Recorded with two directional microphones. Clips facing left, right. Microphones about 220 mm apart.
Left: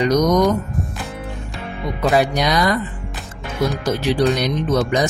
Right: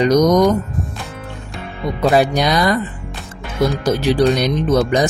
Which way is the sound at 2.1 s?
30° right (ahead or behind).